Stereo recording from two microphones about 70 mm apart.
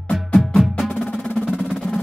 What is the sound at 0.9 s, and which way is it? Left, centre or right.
Music, centre.